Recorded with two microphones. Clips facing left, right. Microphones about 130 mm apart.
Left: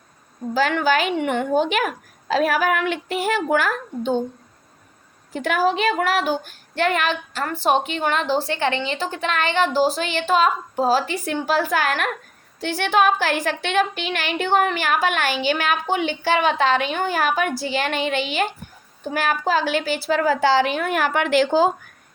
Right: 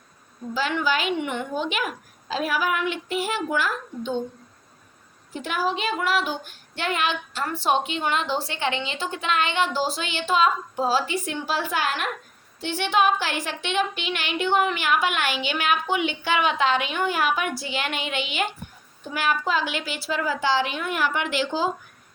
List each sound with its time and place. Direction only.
0.5 s a woman's voice: 50° left (ahead or behind)
5.3 s a woman's voice: 65° left (ahead or behind); by 11.9 s 45° left (ahead or behind)
11.9 s a woman's voice: 60° left (ahead or behind)
12.9 s a woman's voice: 45° left (ahead or behind)
20.1 s a woman's voice: 55° left (ahead or behind)